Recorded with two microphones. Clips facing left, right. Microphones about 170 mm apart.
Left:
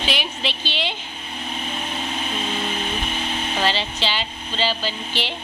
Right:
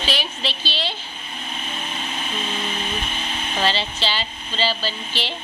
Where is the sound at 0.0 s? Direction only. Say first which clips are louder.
Left 1 dB; 15° left (ahead or behind).